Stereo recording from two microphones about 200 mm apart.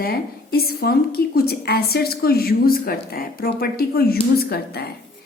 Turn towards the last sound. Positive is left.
turn(degrees=50)  # may be behind; listen again after turning